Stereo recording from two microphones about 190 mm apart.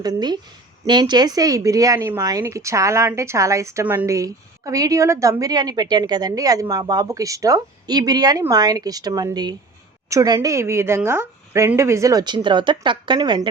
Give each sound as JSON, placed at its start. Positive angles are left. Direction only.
{"t": 0.0, "sound": "a woman's voice", "side_deg": -20}